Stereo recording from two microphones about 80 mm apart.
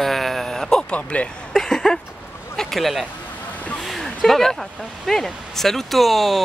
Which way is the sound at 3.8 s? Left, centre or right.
Centre.